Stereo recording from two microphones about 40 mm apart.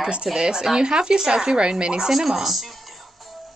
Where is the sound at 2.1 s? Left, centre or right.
Centre.